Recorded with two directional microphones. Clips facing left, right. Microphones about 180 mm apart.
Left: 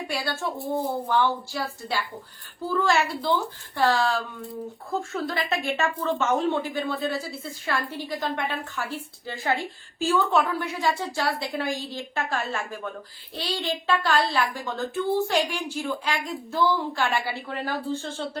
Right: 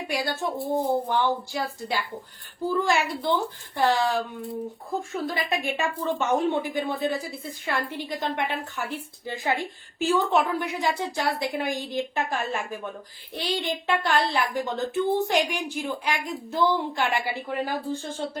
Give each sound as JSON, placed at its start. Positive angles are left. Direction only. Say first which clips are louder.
{"t": 0.1, "sound": "speech", "louder": "right 3 dB", "side_deg": -15}
{"t": 5.1, "sound": "a child's voice", "louder": "right 1 dB", "side_deg": -15}